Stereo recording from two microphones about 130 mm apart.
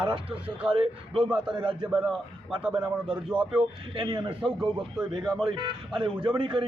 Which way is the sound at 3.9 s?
35° right (ahead or behind).